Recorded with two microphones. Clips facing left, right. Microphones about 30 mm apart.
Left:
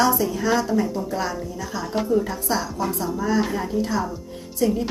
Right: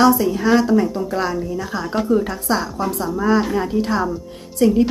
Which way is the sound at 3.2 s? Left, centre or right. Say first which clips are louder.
Right 6 dB; right.